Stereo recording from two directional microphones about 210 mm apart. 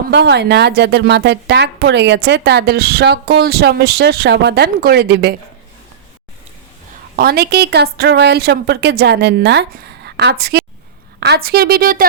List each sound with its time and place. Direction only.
0.1 s a woman's voice: 55° right (ahead or behind)
7.2 s a woman's voice: 50° right (ahead or behind)